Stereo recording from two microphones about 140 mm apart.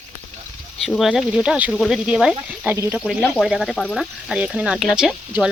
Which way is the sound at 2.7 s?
20° right (ahead or behind).